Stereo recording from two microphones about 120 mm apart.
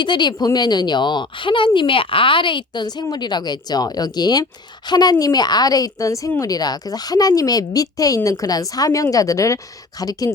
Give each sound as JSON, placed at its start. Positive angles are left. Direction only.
{"t": 0.0, "sound": "speech", "side_deg": 40}